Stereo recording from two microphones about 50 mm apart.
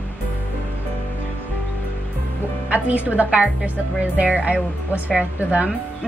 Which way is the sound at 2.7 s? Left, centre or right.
Right.